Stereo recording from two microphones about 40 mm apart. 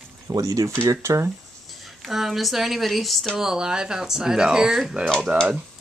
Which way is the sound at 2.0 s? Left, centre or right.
Centre.